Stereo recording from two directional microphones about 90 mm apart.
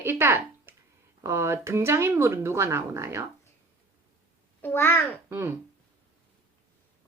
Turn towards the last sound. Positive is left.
turn(degrees=-30)  # may be behind; listen again after turning